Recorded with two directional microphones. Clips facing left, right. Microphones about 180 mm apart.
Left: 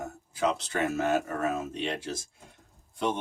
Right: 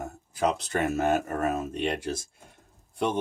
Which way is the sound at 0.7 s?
50° right (ahead or behind).